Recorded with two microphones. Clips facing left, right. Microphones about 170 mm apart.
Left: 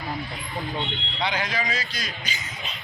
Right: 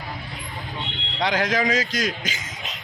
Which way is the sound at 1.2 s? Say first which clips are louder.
Right 6 dB; 90° right.